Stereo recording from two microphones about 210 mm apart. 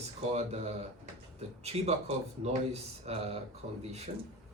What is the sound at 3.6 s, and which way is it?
Speech, 50° right (ahead or behind).